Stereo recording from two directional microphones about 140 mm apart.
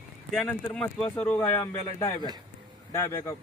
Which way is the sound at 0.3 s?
10° left (ahead or behind).